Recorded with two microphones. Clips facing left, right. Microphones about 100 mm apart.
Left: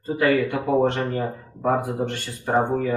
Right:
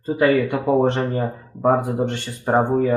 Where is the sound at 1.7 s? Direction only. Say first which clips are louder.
Right 3 dB; 20° right (ahead or behind).